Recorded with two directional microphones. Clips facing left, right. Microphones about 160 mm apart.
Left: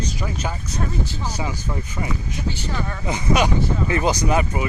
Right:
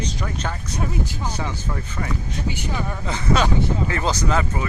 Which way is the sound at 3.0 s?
15° left (ahead or behind).